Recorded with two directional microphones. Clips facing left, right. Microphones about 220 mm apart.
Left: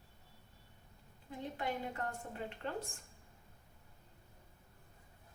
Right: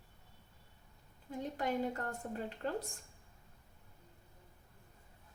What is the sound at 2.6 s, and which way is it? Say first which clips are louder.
Speech: right 4 dB; 40° right (ahead or behind).